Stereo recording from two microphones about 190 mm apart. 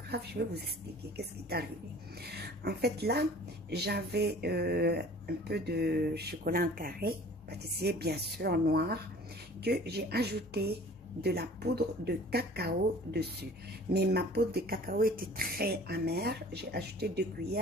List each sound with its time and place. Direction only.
0.1 s a woman's voice: 55° right (ahead or behind)